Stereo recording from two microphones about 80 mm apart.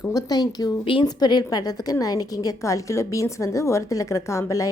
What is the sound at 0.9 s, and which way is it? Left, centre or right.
Speech, left.